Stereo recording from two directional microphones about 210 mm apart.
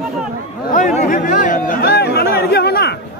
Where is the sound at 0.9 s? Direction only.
40° left (ahead or behind).